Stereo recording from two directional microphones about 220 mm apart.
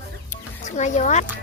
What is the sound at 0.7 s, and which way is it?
Speech, 30° left (ahead or behind).